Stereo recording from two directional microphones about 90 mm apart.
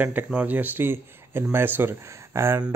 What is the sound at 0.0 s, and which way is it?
Speech, 20° right (ahead or behind).